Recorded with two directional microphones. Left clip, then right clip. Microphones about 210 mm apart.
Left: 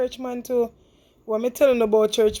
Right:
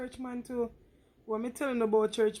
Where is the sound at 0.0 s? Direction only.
40° left (ahead or behind).